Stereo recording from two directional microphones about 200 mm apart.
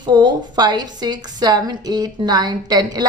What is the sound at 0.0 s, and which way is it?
A woman's voice, 20° right (ahead or behind).